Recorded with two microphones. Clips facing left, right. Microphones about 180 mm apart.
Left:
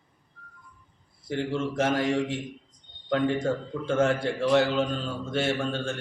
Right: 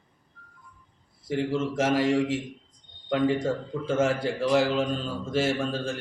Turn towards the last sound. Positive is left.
turn(degrees=0)  # may be behind; listen again after turning